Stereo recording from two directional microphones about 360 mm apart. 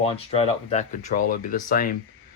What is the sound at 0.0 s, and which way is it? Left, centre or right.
Speech, centre.